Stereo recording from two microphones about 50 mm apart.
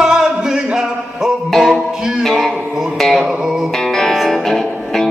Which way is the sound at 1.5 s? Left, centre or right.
Centre.